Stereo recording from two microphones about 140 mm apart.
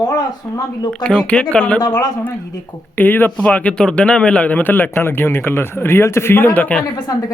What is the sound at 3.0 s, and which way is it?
Speech, 15° left (ahead or behind).